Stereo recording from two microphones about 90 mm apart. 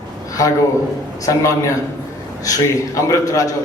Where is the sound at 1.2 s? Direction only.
35° left (ahead or behind).